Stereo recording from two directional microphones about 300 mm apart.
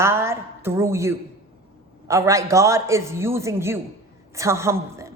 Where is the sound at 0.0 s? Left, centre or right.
Centre.